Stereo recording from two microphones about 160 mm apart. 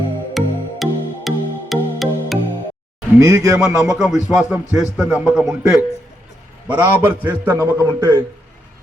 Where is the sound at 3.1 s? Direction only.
20° right (ahead or behind).